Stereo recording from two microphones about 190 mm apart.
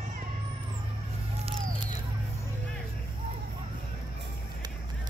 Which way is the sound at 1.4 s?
30° right (ahead or behind).